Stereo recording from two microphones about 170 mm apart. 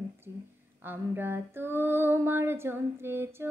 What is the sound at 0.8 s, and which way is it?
Female singing, 10° right (ahead or behind).